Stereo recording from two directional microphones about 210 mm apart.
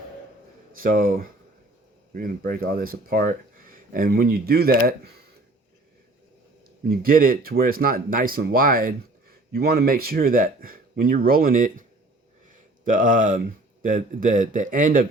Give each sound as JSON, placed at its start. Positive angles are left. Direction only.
{"t": 0.8, "sound": "a man's voice", "side_deg": -40}
{"t": 6.8, "sound": "a man's voice", "side_deg": -45}